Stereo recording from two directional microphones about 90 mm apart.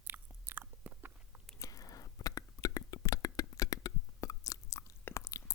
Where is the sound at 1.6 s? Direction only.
40° left (ahead or behind).